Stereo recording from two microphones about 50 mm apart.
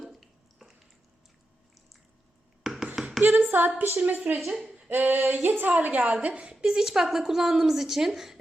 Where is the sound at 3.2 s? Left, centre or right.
Right.